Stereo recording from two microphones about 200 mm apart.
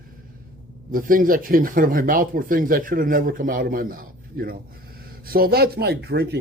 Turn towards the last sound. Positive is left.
turn(degrees=-55)  # may be behind; listen again after turning